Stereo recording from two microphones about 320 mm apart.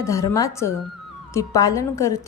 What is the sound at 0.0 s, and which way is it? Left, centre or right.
A woman's voice, centre.